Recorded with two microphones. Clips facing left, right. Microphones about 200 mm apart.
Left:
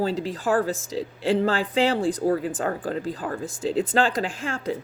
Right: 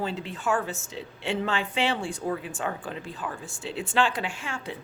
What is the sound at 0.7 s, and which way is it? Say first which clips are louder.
Speech: left 8 dB; 90° left.